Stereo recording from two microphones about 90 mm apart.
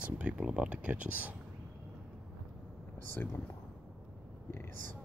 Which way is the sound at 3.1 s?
25° left (ahead or behind).